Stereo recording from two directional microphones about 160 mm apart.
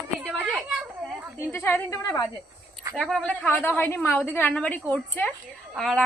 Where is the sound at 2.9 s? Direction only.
5° left (ahead or behind).